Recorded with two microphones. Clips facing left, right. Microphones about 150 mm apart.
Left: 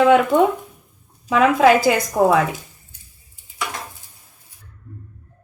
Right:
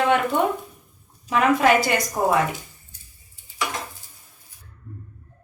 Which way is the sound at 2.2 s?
90° left.